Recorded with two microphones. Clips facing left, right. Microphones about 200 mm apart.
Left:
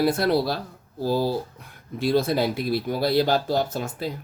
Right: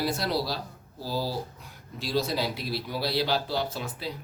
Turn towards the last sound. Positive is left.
turn(degrees=45)  # may be behind; listen again after turning